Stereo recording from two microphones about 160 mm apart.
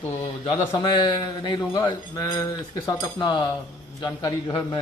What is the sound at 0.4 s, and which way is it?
A man's voice, 30° left (ahead or behind).